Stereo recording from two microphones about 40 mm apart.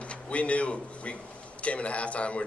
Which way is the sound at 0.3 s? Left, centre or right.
Left.